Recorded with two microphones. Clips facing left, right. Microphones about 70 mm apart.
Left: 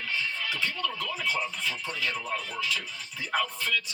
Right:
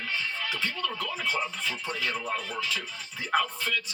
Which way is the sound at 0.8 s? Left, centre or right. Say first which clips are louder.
Even; right.